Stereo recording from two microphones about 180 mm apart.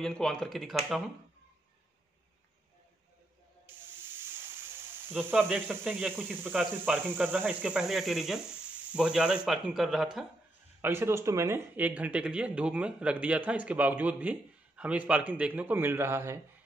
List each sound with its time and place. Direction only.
0.0 s speech: 5° left (ahead or behind)
5.1 s speech: 10° right (ahead or behind)
10.8 s speech: 15° right (ahead or behind)